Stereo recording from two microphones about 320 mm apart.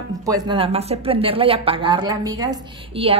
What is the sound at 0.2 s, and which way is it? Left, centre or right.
A woman's voice, centre.